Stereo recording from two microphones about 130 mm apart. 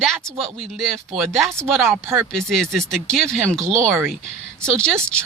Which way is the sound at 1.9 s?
20° right (ahead or behind).